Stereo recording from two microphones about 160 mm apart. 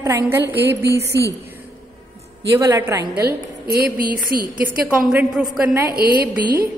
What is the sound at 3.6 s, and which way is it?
Speech, 70° right (ahead or behind).